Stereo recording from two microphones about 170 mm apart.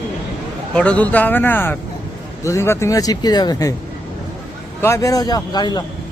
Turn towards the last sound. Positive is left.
turn(degrees=25)  # may be behind; listen again after turning